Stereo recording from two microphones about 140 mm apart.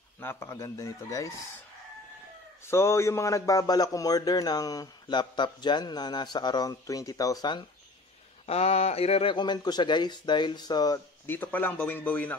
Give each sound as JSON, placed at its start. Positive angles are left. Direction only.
{"t": 0.2, "sound": "a man's voice", "side_deg": 15}
{"t": 2.6, "sound": "a man's voice", "side_deg": 20}
{"t": 8.5, "sound": "speech", "side_deg": 45}
{"t": 11.2, "sound": "speech", "side_deg": 15}